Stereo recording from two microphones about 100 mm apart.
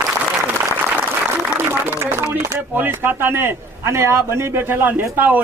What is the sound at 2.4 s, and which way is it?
Speech, 25° right (ahead or behind).